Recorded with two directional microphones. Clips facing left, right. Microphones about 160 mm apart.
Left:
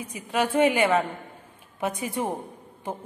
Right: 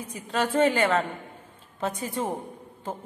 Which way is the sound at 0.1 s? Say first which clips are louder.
Left 1 dB; 10° left (ahead or behind).